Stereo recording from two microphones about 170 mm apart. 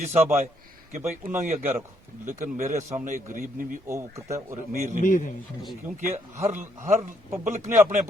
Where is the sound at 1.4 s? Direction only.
40° right (ahead or behind).